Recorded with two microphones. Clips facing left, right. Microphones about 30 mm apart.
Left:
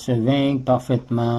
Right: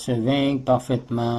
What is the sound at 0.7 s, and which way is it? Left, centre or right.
Speech, right.